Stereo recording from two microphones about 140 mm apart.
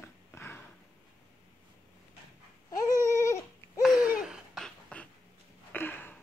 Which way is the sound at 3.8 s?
5° right (ahead or behind).